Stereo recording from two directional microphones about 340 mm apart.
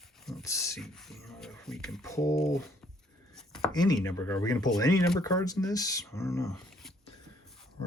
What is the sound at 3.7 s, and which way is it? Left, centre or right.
Speech, centre.